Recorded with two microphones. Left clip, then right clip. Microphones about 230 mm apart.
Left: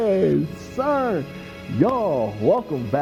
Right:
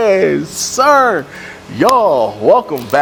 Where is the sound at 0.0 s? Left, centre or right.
Centre.